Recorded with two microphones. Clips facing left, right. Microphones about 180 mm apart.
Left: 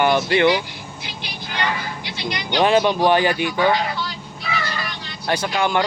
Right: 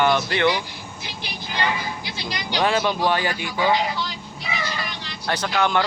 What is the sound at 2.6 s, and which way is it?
Speech, 20° left (ahead or behind).